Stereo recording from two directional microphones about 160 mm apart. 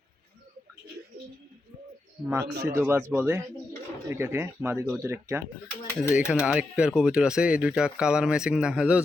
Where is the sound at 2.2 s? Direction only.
15° right (ahead or behind).